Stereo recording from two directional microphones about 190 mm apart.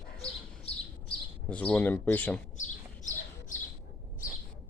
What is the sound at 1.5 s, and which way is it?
Speech, 5° left (ahead or behind).